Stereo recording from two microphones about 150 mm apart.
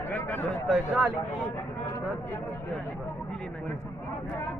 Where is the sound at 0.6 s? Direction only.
5° right (ahead or behind).